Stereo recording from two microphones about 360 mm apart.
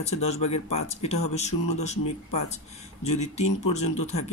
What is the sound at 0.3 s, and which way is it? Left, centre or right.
Speech, centre.